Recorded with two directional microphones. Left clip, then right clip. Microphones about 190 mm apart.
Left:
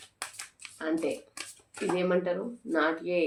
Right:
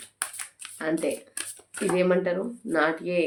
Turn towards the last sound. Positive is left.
turn(degrees=-35)  # may be behind; listen again after turning